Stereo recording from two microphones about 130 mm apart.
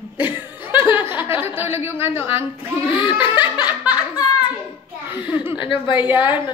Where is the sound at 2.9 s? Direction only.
40° left (ahead or behind).